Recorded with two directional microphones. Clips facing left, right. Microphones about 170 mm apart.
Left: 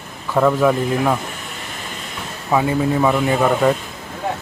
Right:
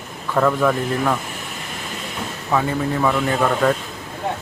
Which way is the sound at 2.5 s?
10° left (ahead or behind).